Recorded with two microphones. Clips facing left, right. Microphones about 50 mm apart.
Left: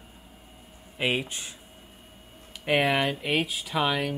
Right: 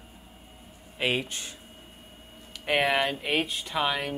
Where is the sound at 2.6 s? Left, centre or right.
Centre.